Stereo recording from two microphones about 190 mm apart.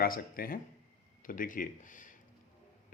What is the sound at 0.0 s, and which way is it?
Speech, 50° left (ahead or behind).